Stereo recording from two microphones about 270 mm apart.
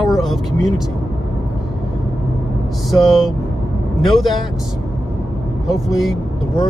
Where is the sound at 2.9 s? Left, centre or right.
Centre.